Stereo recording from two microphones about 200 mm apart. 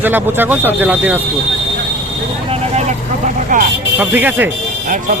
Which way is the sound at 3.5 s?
40° right (ahead or behind).